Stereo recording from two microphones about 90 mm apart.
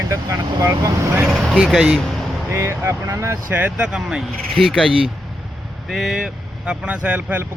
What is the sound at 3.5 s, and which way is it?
Speech, 20° right (ahead or behind).